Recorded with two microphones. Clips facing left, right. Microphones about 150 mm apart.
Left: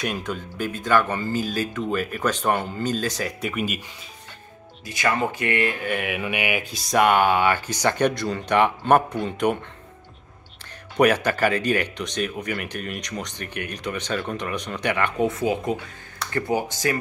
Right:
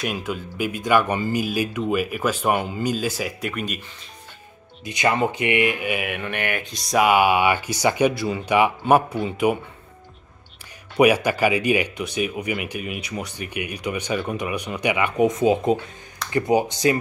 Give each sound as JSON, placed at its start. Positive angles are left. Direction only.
{"t": 0.0, "sound": "speech", "side_deg": -5}
{"t": 4.8, "sound": "speech", "side_deg": -20}
{"t": 11.0, "sound": "speech", "side_deg": -10}